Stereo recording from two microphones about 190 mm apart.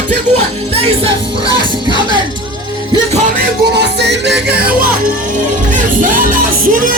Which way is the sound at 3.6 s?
60° right (ahead or behind).